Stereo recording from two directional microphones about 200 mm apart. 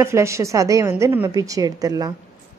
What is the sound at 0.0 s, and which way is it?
A woman's voice, 15° right (ahead or behind).